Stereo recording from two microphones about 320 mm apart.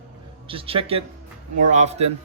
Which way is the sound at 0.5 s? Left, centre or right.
Centre.